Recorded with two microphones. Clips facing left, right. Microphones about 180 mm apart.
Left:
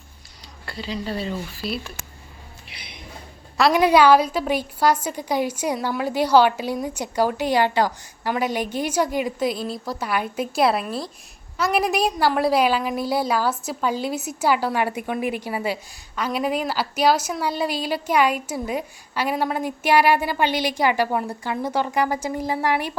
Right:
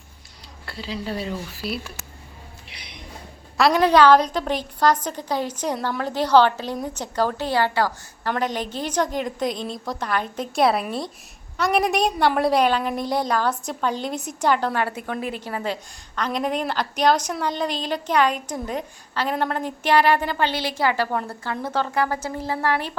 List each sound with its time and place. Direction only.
0.6 s speech: centre (ahead or behind)
2.7 s a sound: 5° left (ahead or behind)
3.8 s a woman's voice: 10° left (ahead or behind)